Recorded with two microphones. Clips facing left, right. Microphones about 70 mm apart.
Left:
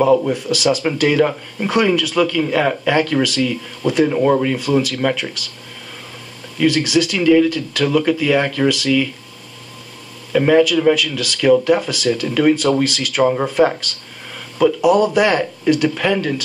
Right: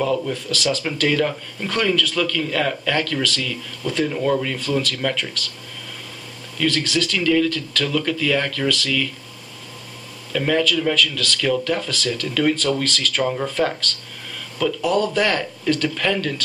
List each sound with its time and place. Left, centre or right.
0.0 s speech: left
6.6 s speech: centre
10.3 s speech: centre